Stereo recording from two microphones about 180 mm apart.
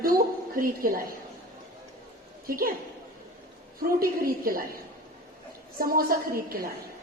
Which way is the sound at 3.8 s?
55° right (ahead or behind).